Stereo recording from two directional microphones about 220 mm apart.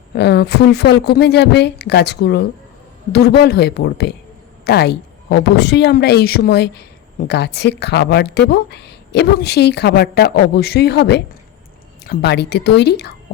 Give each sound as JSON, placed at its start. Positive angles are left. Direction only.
{"t": 0.1, "sound": "a woman's voice", "side_deg": 50}